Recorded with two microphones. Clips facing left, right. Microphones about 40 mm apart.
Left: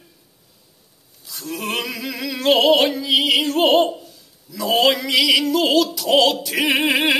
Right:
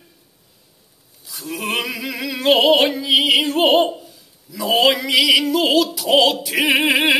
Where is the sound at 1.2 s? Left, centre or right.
Centre.